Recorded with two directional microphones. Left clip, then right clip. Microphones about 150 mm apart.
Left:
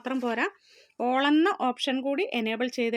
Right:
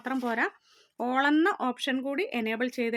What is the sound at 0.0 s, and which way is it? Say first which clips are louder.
Speech: left 1 dB; 15° left (ahead or behind).